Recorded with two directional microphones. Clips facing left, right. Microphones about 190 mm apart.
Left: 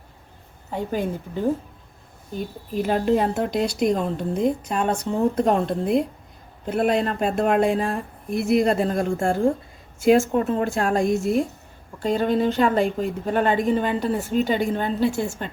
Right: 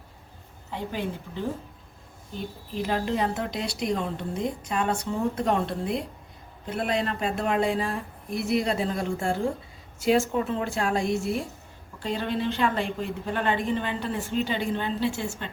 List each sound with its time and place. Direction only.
0.7 s speech: 45° left (ahead or behind)
2.7 s speech: 45° left (ahead or behind)